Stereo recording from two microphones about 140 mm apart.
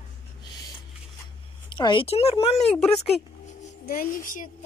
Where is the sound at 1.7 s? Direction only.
35° left (ahead or behind).